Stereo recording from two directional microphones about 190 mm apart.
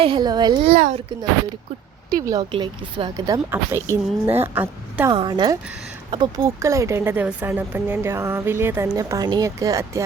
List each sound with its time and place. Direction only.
0.0 s a child's voice: 25° right (ahead or behind)
0.7 s a child's voice: 45° right (ahead or behind)
2.0 s speech: 20° right (ahead or behind)
5.1 s a child's voice: 25° right (ahead or behind)